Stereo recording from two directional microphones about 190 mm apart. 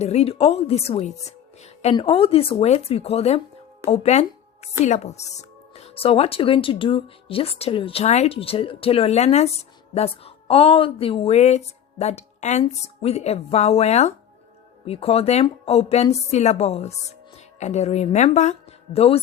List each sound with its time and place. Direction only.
0.0 s a woman's voice: 35° left (ahead or behind)